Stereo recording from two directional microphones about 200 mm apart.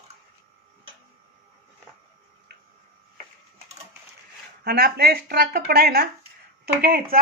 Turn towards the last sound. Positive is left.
turn(degrees=-50)  # may be behind; listen again after turning